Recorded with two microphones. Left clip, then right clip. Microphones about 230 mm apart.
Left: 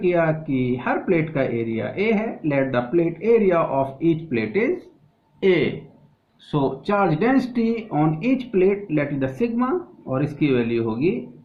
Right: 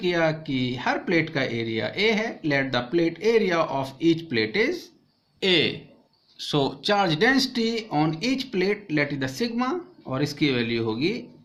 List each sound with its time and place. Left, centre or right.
0.0 s speech: right